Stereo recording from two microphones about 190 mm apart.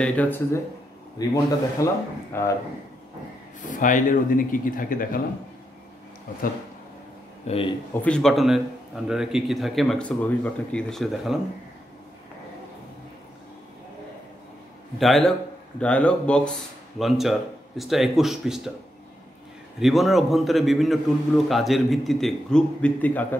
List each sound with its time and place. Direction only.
0.0 s a man's voice: 10° left (ahead or behind)
3.6 s speech: 40° left (ahead or behind)
7.4 s a man's voice: 30° left (ahead or behind)
8.0 s a man's voice: 5° left (ahead or behind)
15.0 s a man's voice: centre (ahead or behind)
19.8 s a man's voice: centre (ahead or behind)